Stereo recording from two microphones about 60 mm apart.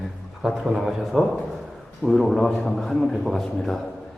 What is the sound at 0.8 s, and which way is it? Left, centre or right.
A man's voice, centre.